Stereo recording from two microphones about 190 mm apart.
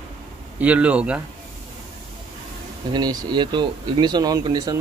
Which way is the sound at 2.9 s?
20° right (ahead or behind).